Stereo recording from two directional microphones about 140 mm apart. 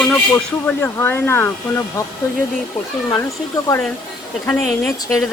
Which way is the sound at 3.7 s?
25° left (ahead or behind).